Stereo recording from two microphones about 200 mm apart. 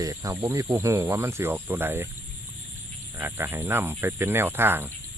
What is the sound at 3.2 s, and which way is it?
Speech, 10° right (ahead or behind).